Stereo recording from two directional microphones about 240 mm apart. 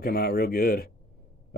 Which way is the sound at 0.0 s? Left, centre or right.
Left.